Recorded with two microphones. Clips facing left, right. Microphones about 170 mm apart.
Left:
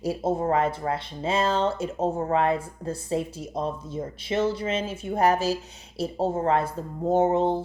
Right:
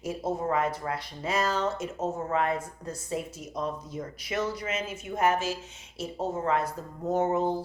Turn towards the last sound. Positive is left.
turn(degrees=25)  # may be behind; listen again after turning